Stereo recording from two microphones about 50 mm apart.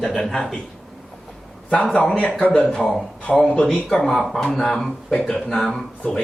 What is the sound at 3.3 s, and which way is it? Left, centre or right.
Speech, centre.